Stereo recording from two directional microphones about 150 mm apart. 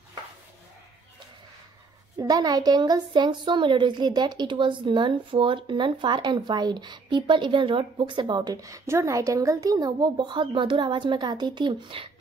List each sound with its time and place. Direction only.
2.1 s a woman's voice: 25° right (ahead or behind)